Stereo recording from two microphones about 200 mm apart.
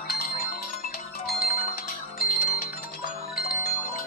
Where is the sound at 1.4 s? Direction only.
45° left (ahead or behind).